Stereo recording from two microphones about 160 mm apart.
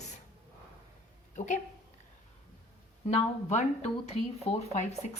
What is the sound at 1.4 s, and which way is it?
Speech, 50° left (ahead or behind).